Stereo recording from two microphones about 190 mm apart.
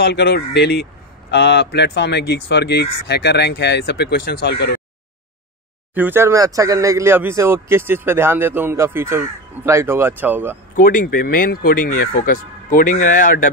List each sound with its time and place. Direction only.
0.0 s speech: 60° left (ahead or behind)
5.9 s speech: 10° right (ahead or behind)
10.8 s speech: 50° left (ahead or behind)